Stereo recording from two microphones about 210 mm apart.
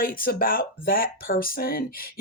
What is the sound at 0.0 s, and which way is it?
Speech, 45° left (ahead or behind).